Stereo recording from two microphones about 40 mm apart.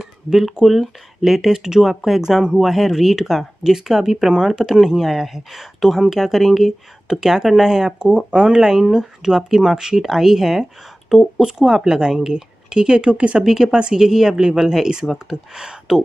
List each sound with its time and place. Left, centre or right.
0.0 s speech: centre
8.3 s speech: centre
8.5 s speech: centre; by 13.4 s right
13.4 s speech: centre